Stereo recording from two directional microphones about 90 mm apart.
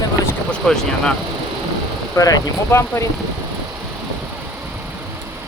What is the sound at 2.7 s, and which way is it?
Speech, 30° left (ahead or behind).